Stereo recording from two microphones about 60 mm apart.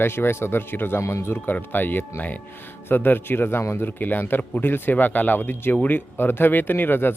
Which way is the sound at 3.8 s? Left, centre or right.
Left.